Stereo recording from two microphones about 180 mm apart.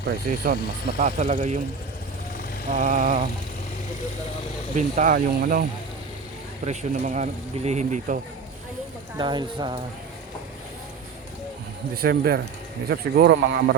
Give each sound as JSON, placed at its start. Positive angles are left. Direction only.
{"t": 0.3, "sound": "speech", "side_deg": -50}
{"t": 2.6, "sound": "speech", "side_deg": -45}
{"t": 4.8, "sound": "speech", "side_deg": -45}
{"t": 6.7, "sound": "speech", "side_deg": -45}
{"t": 9.1, "sound": "speech", "side_deg": -25}
{"t": 11.9, "sound": "speech", "side_deg": -55}